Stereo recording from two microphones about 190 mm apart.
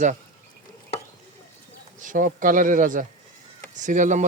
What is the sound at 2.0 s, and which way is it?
Speech, 45° right (ahead or behind).